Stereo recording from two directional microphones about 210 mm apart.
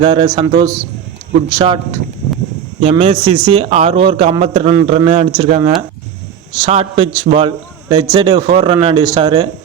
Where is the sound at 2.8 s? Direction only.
30° right (ahead or behind).